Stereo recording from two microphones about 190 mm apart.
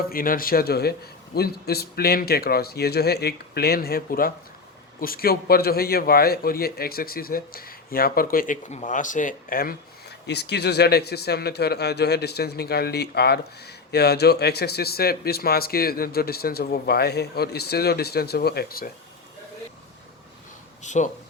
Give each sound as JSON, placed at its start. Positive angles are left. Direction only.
{"t": 0.1, "sound": "a man's voice", "side_deg": 50}
{"t": 20.8, "sound": "speech", "side_deg": 40}